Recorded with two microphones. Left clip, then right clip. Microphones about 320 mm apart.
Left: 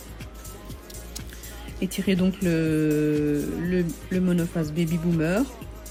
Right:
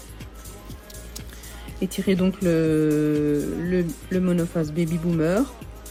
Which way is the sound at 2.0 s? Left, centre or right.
Centre.